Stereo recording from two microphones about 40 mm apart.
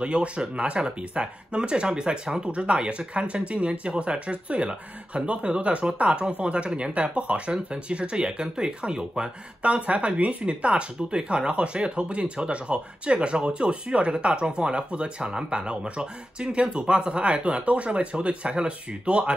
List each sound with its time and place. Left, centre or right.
0.0 s speech: right